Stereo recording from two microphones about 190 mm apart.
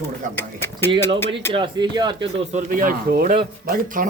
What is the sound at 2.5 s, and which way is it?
Speech, 40° right (ahead or behind).